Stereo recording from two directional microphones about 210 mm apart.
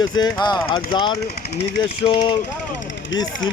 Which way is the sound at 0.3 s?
20° left (ahead or behind).